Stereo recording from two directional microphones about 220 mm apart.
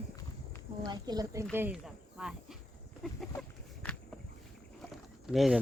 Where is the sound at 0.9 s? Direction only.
20° right (ahead or behind).